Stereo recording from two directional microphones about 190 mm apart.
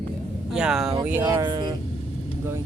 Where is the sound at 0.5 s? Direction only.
5° right (ahead or behind).